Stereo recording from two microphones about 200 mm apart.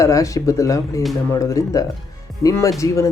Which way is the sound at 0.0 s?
15° left (ahead or behind).